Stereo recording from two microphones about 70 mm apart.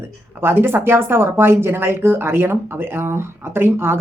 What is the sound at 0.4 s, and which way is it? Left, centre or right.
Speech, right.